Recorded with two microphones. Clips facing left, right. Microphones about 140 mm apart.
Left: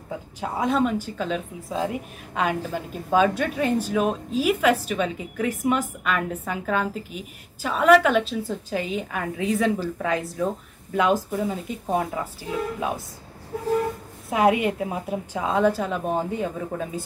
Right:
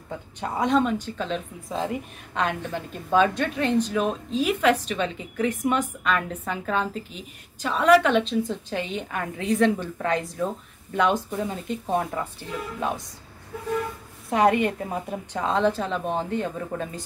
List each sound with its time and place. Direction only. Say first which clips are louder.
0.1 s a woman's voice: left 1 dB; 5° left (ahead or behind)
13.5 s vehicle: left 5 dB; 45° left (ahead or behind)
14.3 s a woman's voice: even; 5° left (ahead or behind)